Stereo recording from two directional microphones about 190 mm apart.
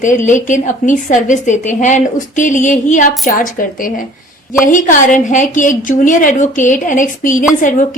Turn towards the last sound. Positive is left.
turn(degrees=45)  # may be behind; listen again after turning